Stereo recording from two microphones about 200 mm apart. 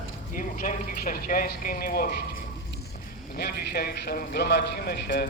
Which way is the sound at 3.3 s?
50° left (ahead or behind).